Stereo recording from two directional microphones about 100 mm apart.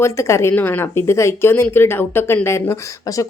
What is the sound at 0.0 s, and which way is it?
A woman's voice, 30° left (ahead or behind).